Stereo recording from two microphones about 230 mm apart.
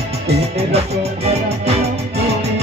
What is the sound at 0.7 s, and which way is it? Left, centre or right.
Music, right.